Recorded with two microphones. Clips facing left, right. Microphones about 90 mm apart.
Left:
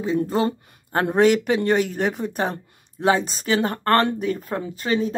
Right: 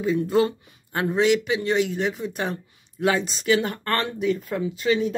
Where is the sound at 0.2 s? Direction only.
40° left (ahead or behind).